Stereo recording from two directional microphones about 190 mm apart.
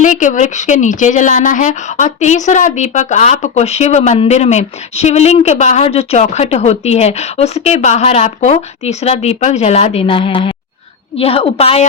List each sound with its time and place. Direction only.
0.0 s speech: 40° left (ahead or behind)